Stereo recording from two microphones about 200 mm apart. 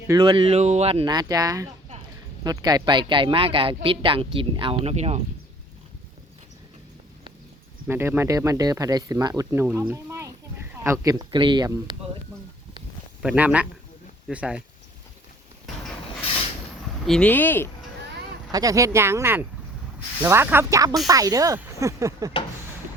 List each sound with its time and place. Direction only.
0.1 s speech: 20° right (ahead or behind)
7.9 s speech: 10° right (ahead or behind)
13.2 s speech: 5° right (ahead or behind)
17.1 s speech: 5° left (ahead or behind)
18.5 s speech: 15° right (ahead or behind)